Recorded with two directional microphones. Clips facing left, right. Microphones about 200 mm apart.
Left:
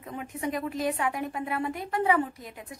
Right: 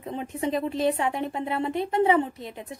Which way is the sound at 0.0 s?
25° right (ahead or behind).